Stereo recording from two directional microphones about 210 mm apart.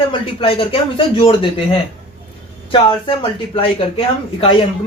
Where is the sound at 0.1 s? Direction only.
25° left (ahead or behind).